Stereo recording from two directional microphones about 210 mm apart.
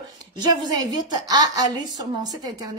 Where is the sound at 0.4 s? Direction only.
20° right (ahead or behind).